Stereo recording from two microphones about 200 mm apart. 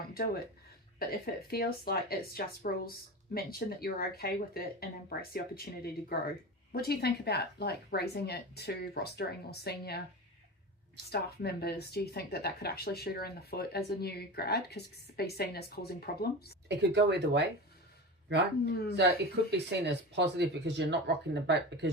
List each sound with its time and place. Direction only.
0.9 s speech: 50° left (ahead or behind)
11.1 s speech: 55° left (ahead or behind)
16.6 s speech: 60° right (ahead or behind)
18.9 s speech: 55° right (ahead or behind)